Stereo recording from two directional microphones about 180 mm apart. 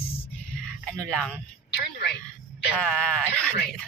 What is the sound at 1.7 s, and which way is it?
Speech, 65° left (ahead or behind).